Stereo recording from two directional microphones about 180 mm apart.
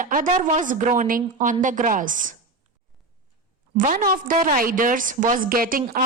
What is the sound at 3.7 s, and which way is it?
A woman's voice, 50° right (ahead or behind).